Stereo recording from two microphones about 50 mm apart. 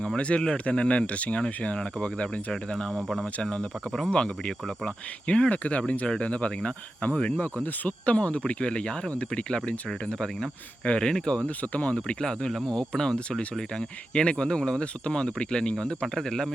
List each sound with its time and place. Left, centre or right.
0.2 s speech: left
2.9 s speech: centre
4.1 s speech: centre
11.4 s speech: left
12.2 s speech: centre